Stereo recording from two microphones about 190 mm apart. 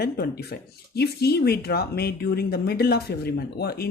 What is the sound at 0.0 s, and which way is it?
Speech, 55° left (ahead or behind).